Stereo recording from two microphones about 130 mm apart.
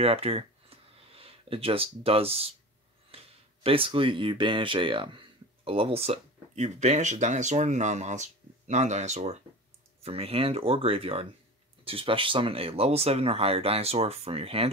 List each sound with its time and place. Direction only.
0.0 s a sound: 50° right (ahead or behind)
3.6 s speech: 45° right (ahead or behind); by 9.4 s 60° right (ahead or behind)
10.0 s speech: 50° right (ahead or behind)